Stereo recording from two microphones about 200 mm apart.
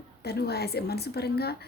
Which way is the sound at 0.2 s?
55° left (ahead or behind).